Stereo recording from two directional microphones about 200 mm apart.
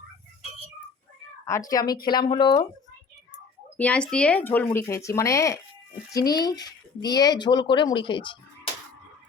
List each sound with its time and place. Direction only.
1.5 s speech: 15° left (ahead or behind)
3.8 s speech: 5° left (ahead or behind); by 8.4 s 25° left (ahead or behind)